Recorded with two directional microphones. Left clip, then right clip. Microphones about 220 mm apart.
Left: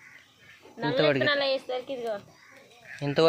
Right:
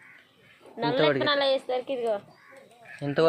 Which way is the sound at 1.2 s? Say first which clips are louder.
Right 1 dB; 15° right (ahead or behind).